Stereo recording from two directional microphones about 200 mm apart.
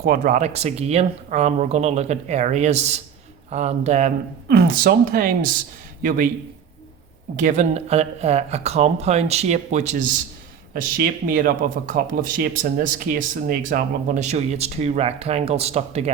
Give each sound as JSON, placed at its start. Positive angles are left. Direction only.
{"t": 0.0, "sound": "speech", "side_deg": -45}
{"t": 4.4, "sound": "a man's voice", "side_deg": -50}
{"t": 7.3, "sound": "speech", "side_deg": -40}